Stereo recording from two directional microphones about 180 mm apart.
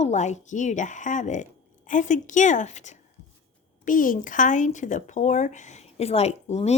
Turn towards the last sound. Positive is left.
turn(degrees=35)  # may be behind; listen again after turning